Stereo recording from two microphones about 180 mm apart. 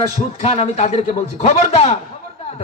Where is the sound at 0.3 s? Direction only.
35° left (ahead or behind).